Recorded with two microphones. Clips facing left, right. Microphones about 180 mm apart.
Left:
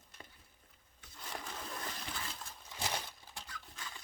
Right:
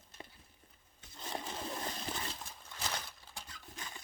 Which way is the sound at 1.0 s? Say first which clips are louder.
Right 4 dB; 25° right (ahead or behind).